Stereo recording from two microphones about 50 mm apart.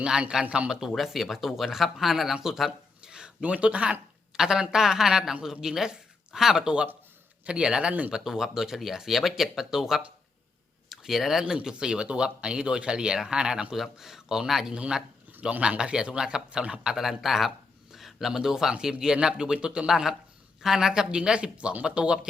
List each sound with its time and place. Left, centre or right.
0.0 s speech: centre
0.9 s speech: centre
3.0 s a sound: centre
3.4 s speech: right
4.4 s a woman's voice: centre
8.1 s speech: centre
11.5 s speech: centre
14.7 s speech: centre
15.3 s a sound: right
15.8 s speech: centre
16.9 s speech: centre; by 22.3 s right